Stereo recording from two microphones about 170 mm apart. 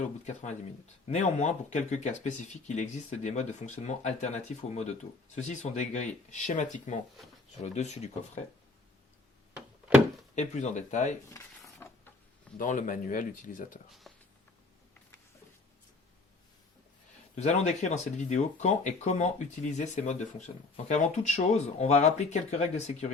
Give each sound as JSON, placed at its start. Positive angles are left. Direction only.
{"t": 1.0, "sound": "speech", "side_deg": 40}
{"t": 10.3, "sound": "speech", "side_deg": 45}
{"t": 11.3, "sound": "a sound", "side_deg": 15}
{"t": 12.5, "sound": "speech", "side_deg": 50}
{"t": 14.0, "sound": "a sound", "side_deg": 0}
{"t": 17.3, "sound": "speech", "side_deg": 40}